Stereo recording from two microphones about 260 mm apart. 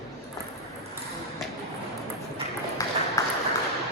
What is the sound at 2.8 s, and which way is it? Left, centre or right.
Ping, centre.